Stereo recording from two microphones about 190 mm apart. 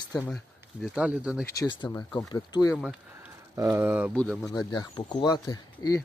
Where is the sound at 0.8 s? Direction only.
5° right (ahead or behind).